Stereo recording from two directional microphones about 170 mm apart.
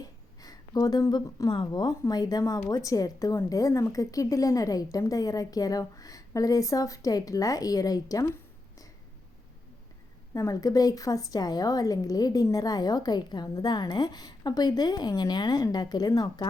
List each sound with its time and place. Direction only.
0.0 s speech: 25° left (ahead or behind)
10.3 s speech: 20° left (ahead or behind)